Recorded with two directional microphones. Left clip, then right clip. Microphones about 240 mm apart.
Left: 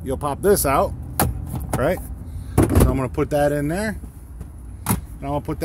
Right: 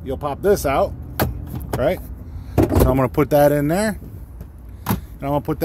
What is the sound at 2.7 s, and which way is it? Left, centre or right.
Speech, centre.